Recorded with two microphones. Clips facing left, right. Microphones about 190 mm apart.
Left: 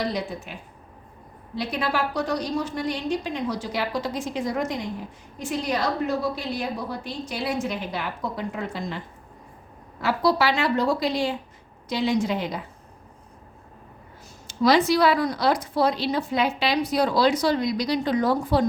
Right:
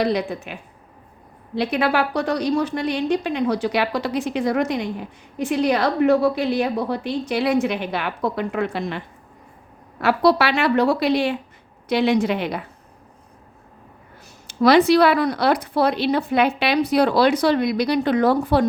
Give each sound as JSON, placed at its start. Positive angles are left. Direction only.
{"t": 0.0, "sound": "a woman's voice", "side_deg": -65}
{"t": 14.4, "sound": "speech", "side_deg": -65}